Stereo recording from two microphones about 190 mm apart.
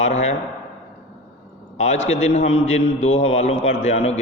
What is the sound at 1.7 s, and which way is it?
A man's voice, 35° left (ahead or behind).